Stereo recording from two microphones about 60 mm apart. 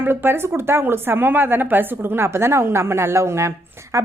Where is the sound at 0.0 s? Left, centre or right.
Right.